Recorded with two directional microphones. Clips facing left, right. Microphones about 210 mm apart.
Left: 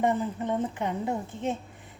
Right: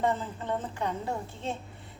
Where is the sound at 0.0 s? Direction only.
15° left (ahead or behind).